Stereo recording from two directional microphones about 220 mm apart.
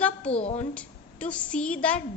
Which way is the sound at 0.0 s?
5° left (ahead or behind).